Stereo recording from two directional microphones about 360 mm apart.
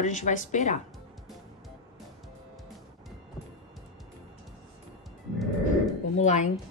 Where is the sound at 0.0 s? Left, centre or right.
Centre.